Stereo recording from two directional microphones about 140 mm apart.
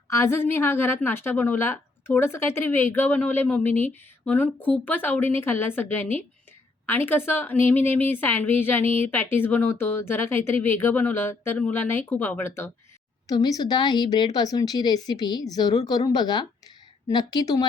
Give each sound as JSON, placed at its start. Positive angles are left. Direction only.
{"t": 0.1, "sound": "a woman's voice", "side_deg": 20}
{"t": 13.2, "sound": "speech", "side_deg": 25}